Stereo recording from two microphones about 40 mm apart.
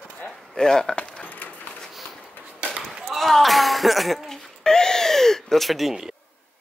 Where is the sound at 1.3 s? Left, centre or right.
Left.